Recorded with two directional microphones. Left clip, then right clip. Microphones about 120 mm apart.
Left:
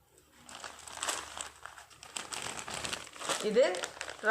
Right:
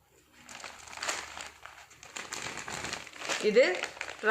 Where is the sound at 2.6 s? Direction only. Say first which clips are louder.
Right 1 dB; 20° right (ahead or behind).